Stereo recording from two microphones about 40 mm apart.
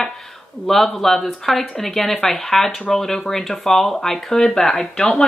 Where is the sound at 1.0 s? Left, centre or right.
Centre.